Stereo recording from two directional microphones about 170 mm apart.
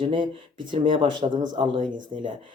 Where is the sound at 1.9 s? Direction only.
50° right (ahead or behind).